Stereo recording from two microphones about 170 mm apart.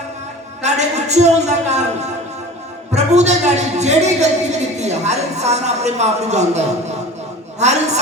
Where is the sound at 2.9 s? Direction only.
40° right (ahead or behind).